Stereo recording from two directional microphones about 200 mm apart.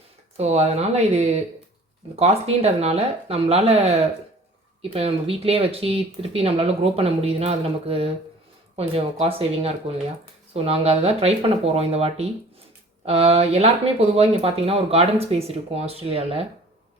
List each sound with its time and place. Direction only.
0.3 s speech: 35° right (ahead or behind)